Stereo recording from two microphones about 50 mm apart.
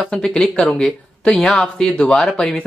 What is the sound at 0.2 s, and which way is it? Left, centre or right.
Speech, centre.